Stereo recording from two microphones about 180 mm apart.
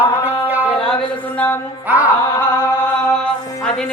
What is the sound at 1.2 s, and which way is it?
Speech, 10° left (ahead or behind).